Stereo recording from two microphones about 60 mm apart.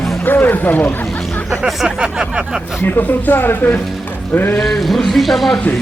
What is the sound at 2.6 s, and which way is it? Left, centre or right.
Speech, centre.